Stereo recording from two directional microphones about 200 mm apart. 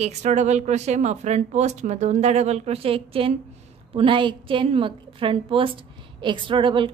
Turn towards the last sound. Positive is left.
turn(degrees=-25)  # may be behind; listen again after turning